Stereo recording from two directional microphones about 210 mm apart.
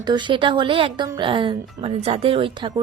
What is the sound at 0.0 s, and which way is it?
Speech, 20° right (ahead or behind).